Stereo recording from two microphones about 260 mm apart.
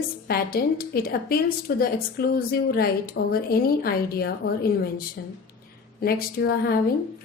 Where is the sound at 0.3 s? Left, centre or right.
Left.